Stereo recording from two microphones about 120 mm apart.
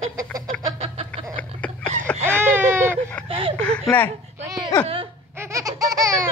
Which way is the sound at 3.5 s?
10° left (ahead or behind).